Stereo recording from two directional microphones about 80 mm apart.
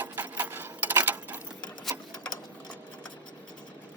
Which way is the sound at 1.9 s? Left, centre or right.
Centre.